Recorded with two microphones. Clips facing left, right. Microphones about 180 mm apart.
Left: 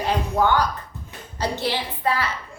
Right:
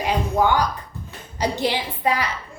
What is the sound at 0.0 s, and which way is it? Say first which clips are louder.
Music: right 1 dB; 15° right (ahead or behind).